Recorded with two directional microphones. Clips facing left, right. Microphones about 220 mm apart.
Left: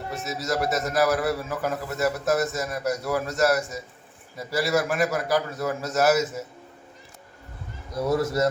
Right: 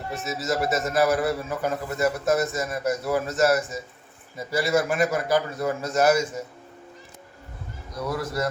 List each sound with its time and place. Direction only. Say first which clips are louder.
0.1 s a man's voice: right 1 dB; centre (ahead or behind)
7.9 s a man's voice: left 5 dB; 25° left (ahead or behind)